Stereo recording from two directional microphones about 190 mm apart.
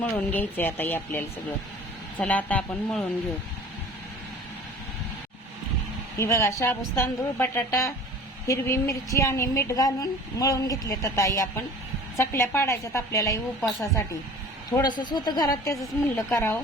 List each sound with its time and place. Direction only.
0.0 s a woman's voice: 10° left (ahead or behind)
6.1 s a woman's voice: 15° left (ahead or behind)
14.7 s a woman's voice: 20° left (ahead or behind)